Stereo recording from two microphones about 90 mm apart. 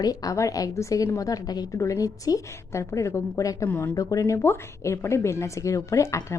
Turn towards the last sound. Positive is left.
turn(degrees=35)  # may be behind; listen again after turning